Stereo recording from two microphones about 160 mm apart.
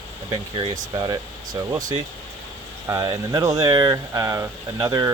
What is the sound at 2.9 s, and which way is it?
Speech, 20° right (ahead or behind).